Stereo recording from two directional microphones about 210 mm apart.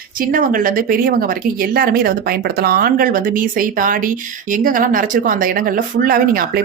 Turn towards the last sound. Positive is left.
turn(degrees=-45)  # may be behind; listen again after turning